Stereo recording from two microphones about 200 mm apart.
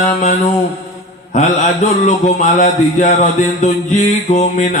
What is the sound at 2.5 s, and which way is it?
A man's voice, 40° left (ahead or behind).